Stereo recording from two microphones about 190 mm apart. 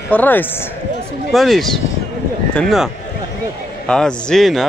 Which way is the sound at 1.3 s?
Centre (ahead or behind).